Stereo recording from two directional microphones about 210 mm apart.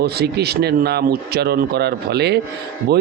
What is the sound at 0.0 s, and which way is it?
A man's voice, 50° right (ahead or behind).